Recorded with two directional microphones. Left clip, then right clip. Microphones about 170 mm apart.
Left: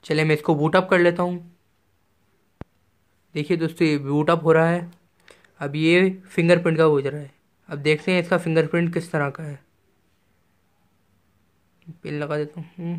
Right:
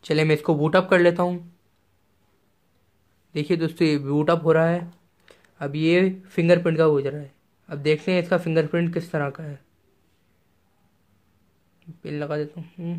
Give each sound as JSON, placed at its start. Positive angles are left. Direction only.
{"t": 0.0, "sound": "speech", "side_deg": 10}
{"t": 3.3, "sound": "speech", "side_deg": 5}
{"t": 11.8, "sound": "speech", "side_deg": 20}